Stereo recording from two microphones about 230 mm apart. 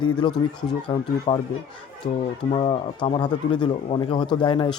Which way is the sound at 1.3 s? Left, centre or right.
Left.